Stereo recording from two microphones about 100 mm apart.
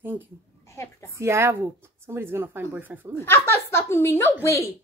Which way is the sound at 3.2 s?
25° left (ahead or behind).